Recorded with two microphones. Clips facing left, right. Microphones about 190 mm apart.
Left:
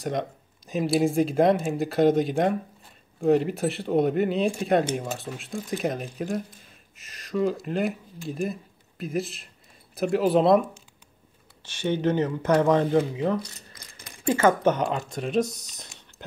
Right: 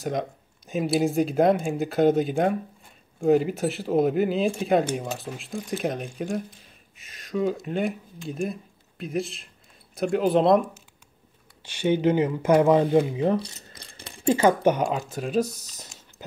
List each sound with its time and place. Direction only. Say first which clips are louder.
0.0 s speech: even; centre (ahead or behind)
11.6 s speech: right 3 dB; 10° right (ahead or behind)
13.1 s a sound: right 2 dB; 25° right (ahead or behind)
14.3 s speech: right 1 dB; 10° right (ahead or behind)